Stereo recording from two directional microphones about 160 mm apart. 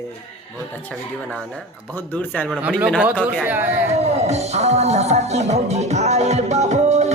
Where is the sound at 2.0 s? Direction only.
10° left (ahead or behind).